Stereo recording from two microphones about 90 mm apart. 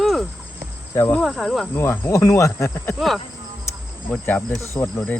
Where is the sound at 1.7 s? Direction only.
25° left (ahead or behind).